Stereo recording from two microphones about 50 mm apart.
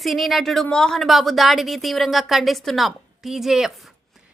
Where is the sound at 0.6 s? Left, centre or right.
Centre.